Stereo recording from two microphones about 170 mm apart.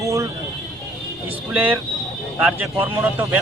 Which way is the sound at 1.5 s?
10° right (ahead or behind).